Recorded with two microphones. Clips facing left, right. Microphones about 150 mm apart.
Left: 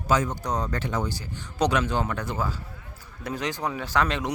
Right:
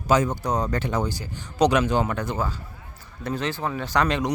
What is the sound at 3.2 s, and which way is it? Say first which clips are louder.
Speech: right 2 dB; 10° left (ahead or behind).